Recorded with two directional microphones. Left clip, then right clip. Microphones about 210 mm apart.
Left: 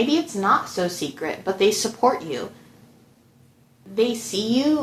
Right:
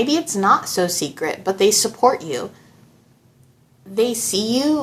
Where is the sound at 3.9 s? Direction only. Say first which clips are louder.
Right 3 dB; 25° right (ahead or behind).